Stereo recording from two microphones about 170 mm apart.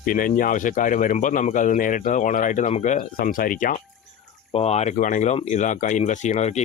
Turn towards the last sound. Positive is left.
turn(degrees=40)  # may be behind; listen again after turning